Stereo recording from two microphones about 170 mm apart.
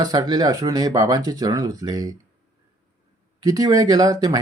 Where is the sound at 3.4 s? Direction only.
20° right (ahead or behind).